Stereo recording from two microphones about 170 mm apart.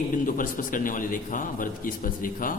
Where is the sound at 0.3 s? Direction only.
50° left (ahead or behind).